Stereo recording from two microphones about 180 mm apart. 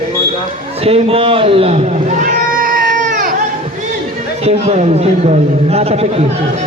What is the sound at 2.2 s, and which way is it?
Cat, 50° right (ahead or behind).